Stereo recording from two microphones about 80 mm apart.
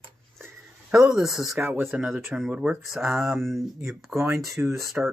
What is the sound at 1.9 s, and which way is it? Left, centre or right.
Speech, centre.